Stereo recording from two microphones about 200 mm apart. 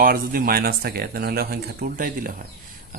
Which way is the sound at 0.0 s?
45° right (ahead or behind).